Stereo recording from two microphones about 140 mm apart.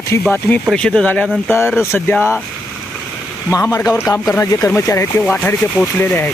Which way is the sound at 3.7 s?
20° left (ahead or behind).